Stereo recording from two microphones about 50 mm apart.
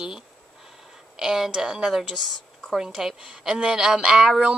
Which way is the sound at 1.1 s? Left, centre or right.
Centre.